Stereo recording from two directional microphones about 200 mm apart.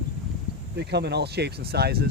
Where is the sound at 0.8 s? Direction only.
55° right (ahead or behind).